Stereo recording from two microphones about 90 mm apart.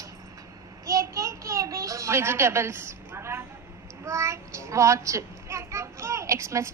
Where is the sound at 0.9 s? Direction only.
35° right (ahead or behind).